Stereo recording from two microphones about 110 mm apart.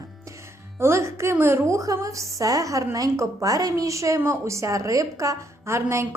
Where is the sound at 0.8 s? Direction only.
25° right (ahead or behind).